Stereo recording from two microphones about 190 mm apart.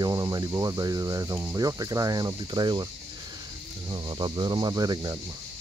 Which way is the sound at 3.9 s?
25° right (ahead or behind).